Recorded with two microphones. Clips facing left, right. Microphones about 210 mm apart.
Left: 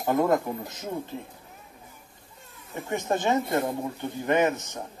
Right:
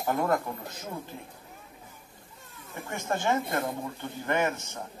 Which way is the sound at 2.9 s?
20° left (ahead or behind).